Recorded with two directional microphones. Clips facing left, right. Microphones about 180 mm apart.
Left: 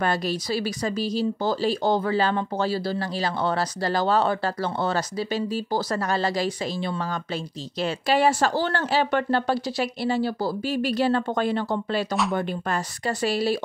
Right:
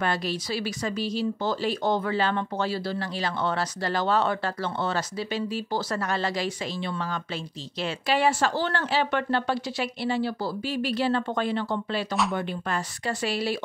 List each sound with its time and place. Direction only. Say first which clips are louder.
0.0 s speech: left 3 dB; 40° left (ahead or behind)